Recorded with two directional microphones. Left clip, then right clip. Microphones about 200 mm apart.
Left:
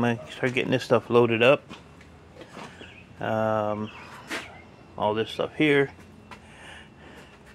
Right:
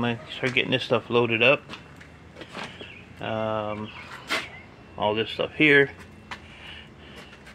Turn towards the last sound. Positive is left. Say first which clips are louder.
# right 4 dB
turn(degrees=15)  # may be behind; listen again after turning